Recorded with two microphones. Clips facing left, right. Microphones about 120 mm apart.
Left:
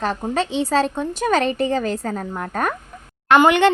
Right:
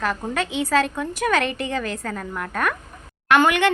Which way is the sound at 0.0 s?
30° left (ahead or behind).